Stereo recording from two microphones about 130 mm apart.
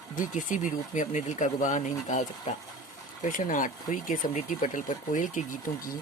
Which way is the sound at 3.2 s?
90° left.